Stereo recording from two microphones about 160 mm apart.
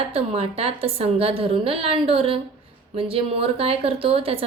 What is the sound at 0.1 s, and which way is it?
A woman's voice, 40° right (ahead or behind).